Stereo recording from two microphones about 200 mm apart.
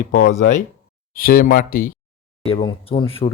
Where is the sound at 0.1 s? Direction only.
40° left (ahead or behind).